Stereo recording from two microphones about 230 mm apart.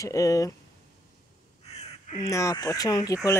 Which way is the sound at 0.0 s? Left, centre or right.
Centre.